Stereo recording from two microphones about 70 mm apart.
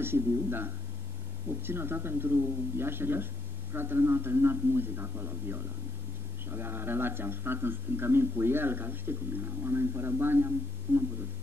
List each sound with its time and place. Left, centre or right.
0.0 s speech: right